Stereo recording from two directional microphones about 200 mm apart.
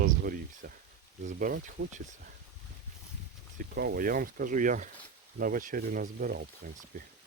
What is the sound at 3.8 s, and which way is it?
Speech, 50° right (ahead or behind).